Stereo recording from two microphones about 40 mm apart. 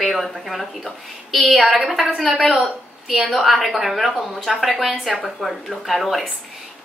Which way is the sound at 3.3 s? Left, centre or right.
Centre.